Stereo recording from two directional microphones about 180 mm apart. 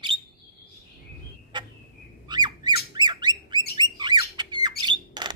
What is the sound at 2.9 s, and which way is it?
Bird, 25° right (ahead or behind).